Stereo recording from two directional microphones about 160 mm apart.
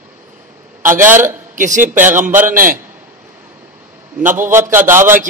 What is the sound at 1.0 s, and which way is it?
Speech, 15° right (ahead or behind).